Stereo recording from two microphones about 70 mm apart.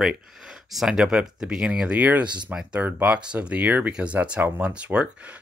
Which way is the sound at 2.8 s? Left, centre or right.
Right.